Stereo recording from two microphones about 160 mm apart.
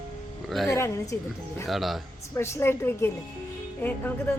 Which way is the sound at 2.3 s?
15° left (ahead or behind).